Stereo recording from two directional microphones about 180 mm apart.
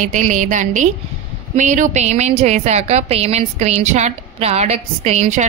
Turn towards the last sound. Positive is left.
turn(degrees=-40)  # may be behind; listen again after turning